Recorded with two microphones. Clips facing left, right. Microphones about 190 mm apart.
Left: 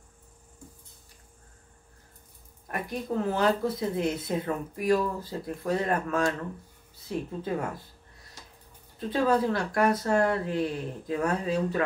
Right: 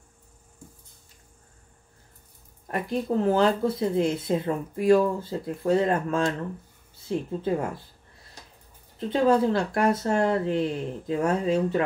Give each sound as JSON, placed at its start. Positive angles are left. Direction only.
{"t": 2.7, "sound": "speech", "side_deg": -30}
{"t": 9.1, "sound": "speech", "side_deg": -25}